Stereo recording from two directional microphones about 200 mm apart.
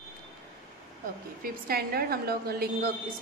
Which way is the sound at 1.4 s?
50° right (ahead or behind).